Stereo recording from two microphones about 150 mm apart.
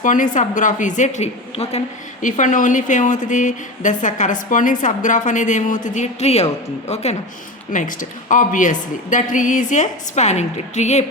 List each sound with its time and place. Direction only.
0.0 s a woman's voice: 60° left (ahead or behind)
2.2 s a woman's voice: 55° left (ahead or behind)
7.7 s a woman's voice: 60° left (ahead or behind)